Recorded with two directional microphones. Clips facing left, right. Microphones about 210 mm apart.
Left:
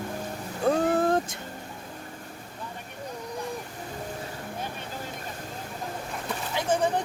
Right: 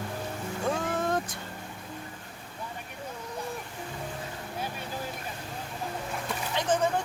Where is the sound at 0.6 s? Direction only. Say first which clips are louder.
Left 7 dB; 35° left (ahead or behind).